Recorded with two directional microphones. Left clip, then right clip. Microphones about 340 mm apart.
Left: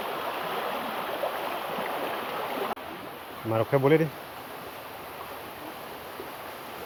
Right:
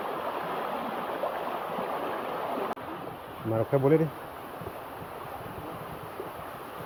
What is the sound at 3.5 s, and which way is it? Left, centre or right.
Speech, centre.